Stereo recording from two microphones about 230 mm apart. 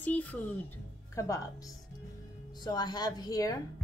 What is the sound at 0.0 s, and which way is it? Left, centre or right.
Speech, centre.